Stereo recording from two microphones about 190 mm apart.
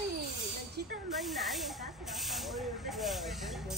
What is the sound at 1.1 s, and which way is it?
Speech, centre (ahead or behind).